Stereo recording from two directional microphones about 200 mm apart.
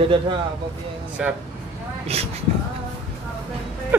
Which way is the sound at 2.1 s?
30° right (ahead or behind).